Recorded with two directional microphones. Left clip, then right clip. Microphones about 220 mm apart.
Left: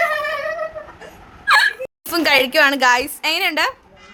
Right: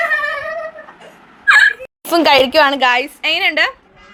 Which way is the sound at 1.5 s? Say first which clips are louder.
Right 5 dB; 10° left (ahead or behind).